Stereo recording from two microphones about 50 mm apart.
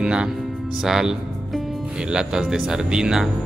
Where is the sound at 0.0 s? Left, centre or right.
Centre.